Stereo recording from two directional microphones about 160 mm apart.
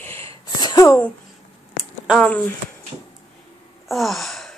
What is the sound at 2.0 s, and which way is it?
Speech, 5° left (ahead or behind).